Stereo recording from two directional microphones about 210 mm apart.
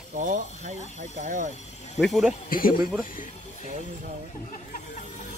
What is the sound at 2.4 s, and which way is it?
Speech, 40° left (ahead or behind).